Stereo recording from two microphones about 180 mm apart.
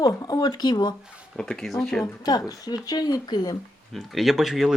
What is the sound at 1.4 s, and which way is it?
Speech, 5° left (ahead or behind).